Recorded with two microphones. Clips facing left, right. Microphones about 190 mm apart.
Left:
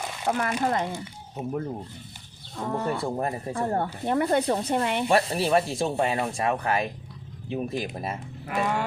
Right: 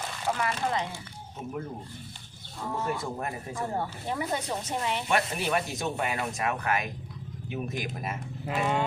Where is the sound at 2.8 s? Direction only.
35° left (ahead or behind).